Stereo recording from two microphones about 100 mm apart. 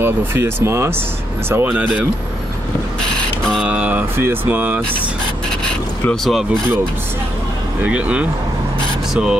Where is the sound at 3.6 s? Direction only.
15° right (ahead or behind).